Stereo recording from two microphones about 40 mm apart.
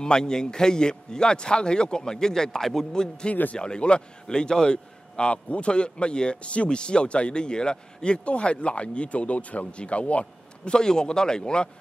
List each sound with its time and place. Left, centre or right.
0.0 s a man's voice: centre
10.7 s a man's voice: centre